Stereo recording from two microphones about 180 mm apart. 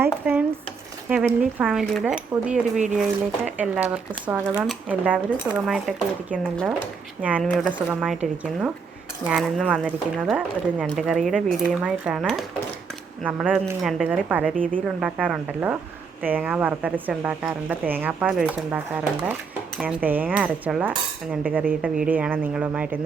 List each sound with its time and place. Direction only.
0.0 s a woman's voice: 10° right (ahead or behind)
9.2 s speech: centre (ahead or behind)
13.2 s a woman's voice: 10° right (ahead or behind)
14.5 s a woman's voice: 50° right (ahead or behind)
14.8 s a woman's voice: 5° right (ahead or behind)